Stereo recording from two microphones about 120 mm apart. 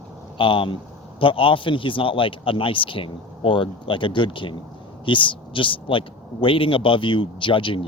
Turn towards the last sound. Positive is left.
turn(degrees=45)  # may be behind; listen again after turning